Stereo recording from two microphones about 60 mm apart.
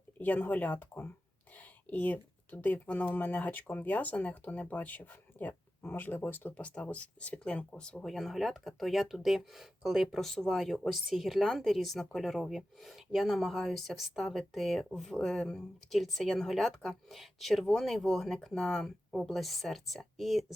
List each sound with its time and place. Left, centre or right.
0.2 s speech: left
6.5 s speech: centre
8.0 s speech: centre
15.9 s speech: centre